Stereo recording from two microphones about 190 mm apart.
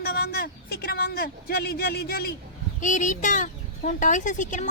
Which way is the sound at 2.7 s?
40° left (ahead or behind).